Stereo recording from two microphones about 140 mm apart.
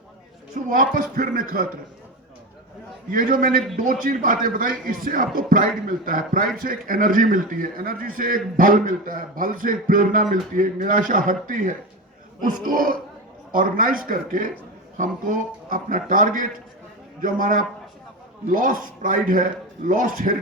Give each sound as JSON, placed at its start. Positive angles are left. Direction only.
{"t": 0.5, "sound": "a man's voice", "side_deg": -80}
{"t": 3.1, "sound": "a man's voice", "side_deg": -80}
{"t": 12.4, "sound": "a man's voice", "side_deg": -90}